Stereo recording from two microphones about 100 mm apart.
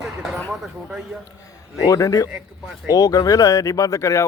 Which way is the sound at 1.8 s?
35° left (ahead or behind).